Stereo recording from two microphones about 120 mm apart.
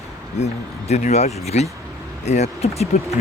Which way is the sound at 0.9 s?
70° left (ahead or behind).